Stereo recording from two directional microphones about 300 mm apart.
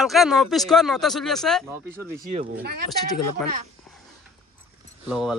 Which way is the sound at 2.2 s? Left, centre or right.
Right.